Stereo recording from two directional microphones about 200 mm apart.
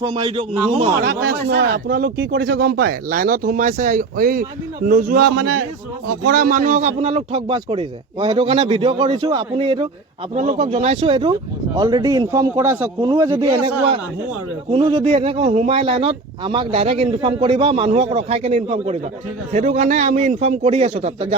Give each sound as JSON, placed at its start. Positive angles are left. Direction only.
{"t": 0.0, "sound": "a man's voice", "side_deg": -20}
{"t": 1.5, "sound": "a man's voice", "side_deg": -60}
{"t": 14.7, "sound": "a man's voice", "side_deg": -30}